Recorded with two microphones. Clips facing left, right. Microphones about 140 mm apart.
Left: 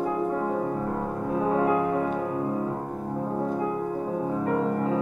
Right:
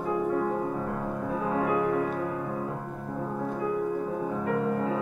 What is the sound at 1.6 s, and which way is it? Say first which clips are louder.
Music: even; 30° left (ahead or behind).